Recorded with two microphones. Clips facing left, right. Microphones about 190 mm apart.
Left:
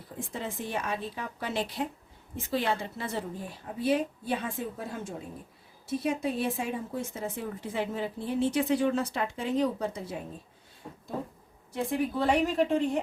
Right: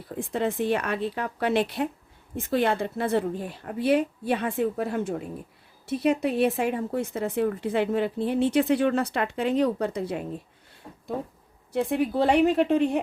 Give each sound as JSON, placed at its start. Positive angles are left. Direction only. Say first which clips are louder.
{"t": 0.2, "sound": "a woman's voice", "louder": "right 10 dB", "side_deg": -65}
{"t": 11.7, "sound": "a woman's voice", "louder": "right 5 dB", "side_deg": -65}